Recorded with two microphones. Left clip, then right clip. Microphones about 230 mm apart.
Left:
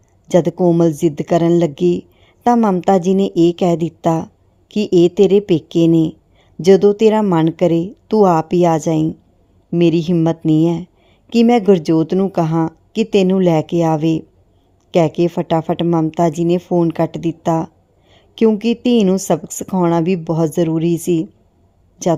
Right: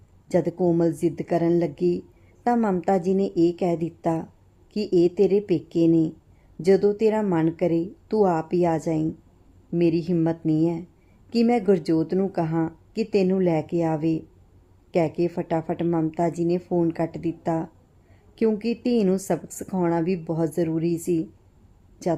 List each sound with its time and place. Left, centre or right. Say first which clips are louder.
0.3 s a woman's voice: left 9 dB; left